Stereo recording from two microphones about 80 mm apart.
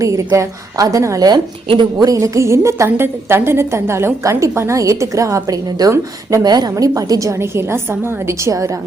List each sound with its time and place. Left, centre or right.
0.0 s a woman's voice: right
1.3 s speech: right
2.0 s a woman's voice: right
6.4 s a woman's voice: right